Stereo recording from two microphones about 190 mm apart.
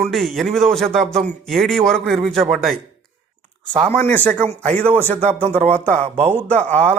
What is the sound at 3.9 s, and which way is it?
A man's voice, 10° left (ahead or behind).